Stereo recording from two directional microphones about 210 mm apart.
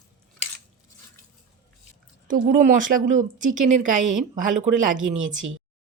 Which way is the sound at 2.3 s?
40° right (ahead or behind).